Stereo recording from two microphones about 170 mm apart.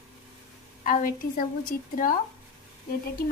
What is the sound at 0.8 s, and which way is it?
Child singing, 55° left (ahead or behind).